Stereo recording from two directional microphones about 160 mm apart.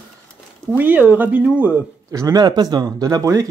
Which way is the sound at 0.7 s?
10° right (ahead or behind).